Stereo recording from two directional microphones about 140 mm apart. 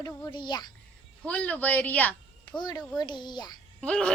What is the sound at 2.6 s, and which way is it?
Speech, 30° left (ahead or behind).